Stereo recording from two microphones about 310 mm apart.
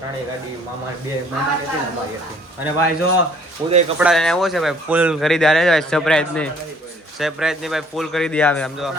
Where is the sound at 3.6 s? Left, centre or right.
Centre.